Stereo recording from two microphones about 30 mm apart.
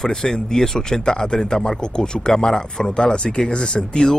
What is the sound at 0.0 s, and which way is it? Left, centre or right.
Speech, left.